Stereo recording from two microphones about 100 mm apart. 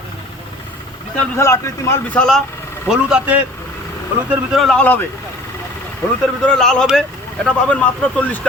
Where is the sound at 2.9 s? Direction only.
10° right (ahead or behind).